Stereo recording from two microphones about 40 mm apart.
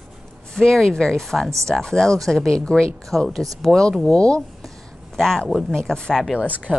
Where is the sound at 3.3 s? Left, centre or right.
Centre.